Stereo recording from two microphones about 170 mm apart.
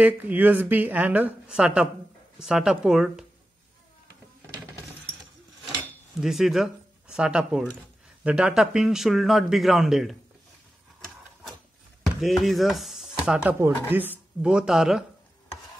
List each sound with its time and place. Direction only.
0.0 s a man's voice: 10° right (ahead or behind)
6.2 s a man's voice: centre (ahead or behind)
12.0 s a man's voice: centre (ahead or behind)